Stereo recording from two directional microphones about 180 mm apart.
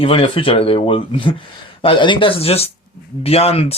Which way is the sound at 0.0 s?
30° left (ahead or behind).